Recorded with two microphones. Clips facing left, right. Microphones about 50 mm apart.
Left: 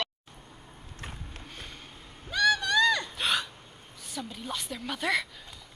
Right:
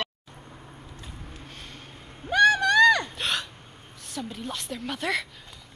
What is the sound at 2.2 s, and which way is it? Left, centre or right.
Vehicle, right.